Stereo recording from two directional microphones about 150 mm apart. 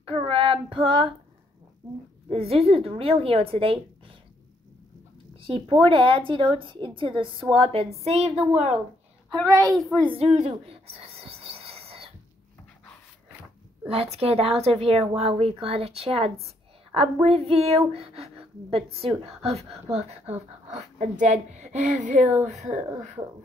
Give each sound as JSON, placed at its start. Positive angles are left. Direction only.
{"t": 0.0, "sound": "child singing", "side_deg": -35}
{"t": 2.2, "sound": "speech", "side_deg": -40}
{"t": 5.4, "sound": "speech", "side_deg": -35}
{"t": 9.4, "sound": "a child's voice", "side_deg": -25}
{"t": 10.1, "sound": "a sound", "side_deg": -45}
{"t": 13.8, "sound": "a woman's voice", "side_deg": -40}
{"t": 19.9, "sound": "speech", "side_deg": -45}